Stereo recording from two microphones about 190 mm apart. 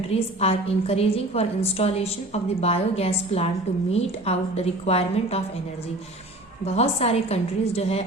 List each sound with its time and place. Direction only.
0.1 s a woman's voice: 30° left (ahead or behind)
6.7 s a woman's voice: 35° left (ahead or behind)